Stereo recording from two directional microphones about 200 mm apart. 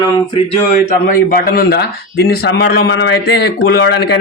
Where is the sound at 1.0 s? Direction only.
45° left (ahead or behind).